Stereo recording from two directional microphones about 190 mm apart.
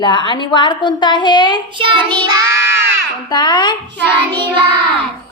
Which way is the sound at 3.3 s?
25° left (ahead or behind).